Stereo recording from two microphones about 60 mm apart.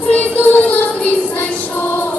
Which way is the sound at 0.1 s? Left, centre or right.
Left.